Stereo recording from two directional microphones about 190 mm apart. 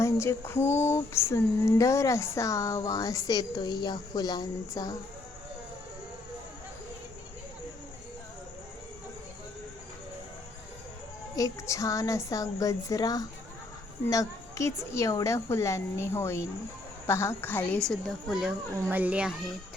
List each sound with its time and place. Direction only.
0.0 s a woman's voice: 15° left (ahead or behind)
11.3 s a woman's voice: 15° left (ahead or behind)
17.8 s a child's voice: centre (ahead or behind)